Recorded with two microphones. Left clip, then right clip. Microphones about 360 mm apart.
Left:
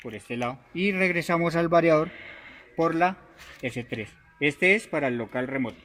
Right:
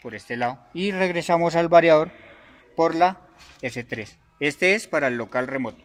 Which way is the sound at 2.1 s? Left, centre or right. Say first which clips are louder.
Left 4 dB; centre.